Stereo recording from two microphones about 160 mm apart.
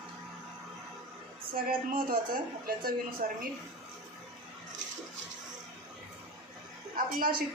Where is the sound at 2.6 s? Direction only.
65° right (ahead or behind).